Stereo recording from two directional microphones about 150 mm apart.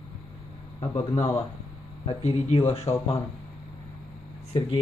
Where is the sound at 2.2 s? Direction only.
45° left (ahead or behind).